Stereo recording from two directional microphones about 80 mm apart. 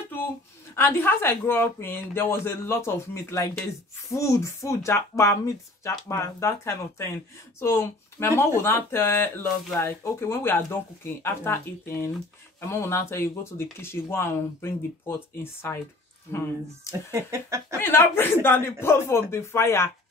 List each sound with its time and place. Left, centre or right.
0.7 s speech: left
17.1 s a sound: right
17.8 s speech: left